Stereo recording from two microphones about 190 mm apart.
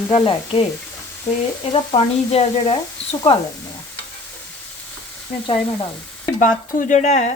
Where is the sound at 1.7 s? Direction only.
30° left (ahead or behind).